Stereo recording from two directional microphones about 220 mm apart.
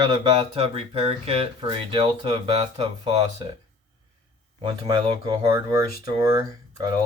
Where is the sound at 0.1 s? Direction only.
25° right (ahead or behind).